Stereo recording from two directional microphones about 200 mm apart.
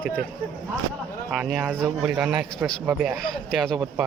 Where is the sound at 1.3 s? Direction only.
5° right (ahead or behind).